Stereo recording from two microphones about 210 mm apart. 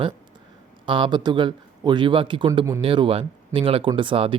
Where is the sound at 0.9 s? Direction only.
25° right (ahead or behind).